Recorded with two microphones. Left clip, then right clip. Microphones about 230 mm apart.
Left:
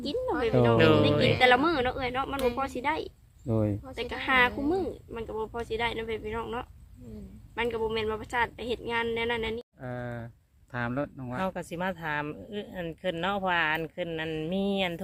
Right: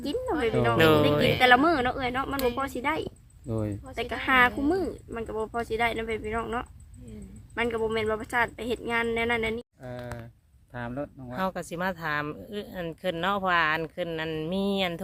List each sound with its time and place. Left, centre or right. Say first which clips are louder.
0.1 s speech: right 1 dB; right
0.8 s speech: right 5 dB; centre
1.4 s speech: right 4 dB; right
3.5 s speech: left 3 dB; left
3.9 s speech: right 3 dB; right
9.8 s speech: left 1 dB; left
11.3 s speech: right 2 dB; centre